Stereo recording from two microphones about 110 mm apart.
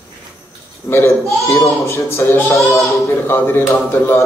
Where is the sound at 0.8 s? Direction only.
20° left (ahead or behind).